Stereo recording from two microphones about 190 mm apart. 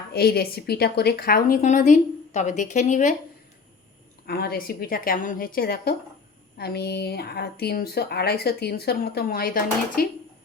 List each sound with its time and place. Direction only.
0.1 s a woman's voice: 55° left (ahead or behind); by 3.2 s 40° left (ahead or behind)
4.3 s a woman's voice: 55° left (ahead or behind)